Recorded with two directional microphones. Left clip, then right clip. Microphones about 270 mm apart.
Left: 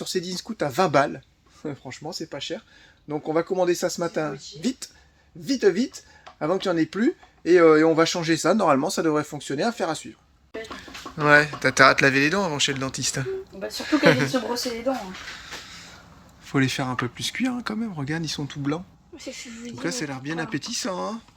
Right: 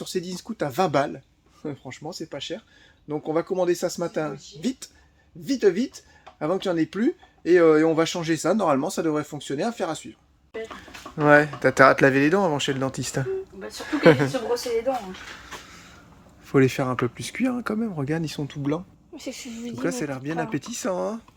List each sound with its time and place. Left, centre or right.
0.0 s speech: centre
10.8 s speech: centre
15.4 s a sound: centre
16.5 s speech: centre
19.1 s speech: right
19.8 s speech: centre